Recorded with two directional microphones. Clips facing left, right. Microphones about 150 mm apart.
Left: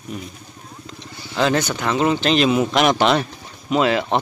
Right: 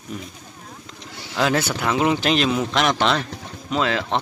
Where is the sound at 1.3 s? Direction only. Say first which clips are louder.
Left 2 dB; 5° right (ahead or behind).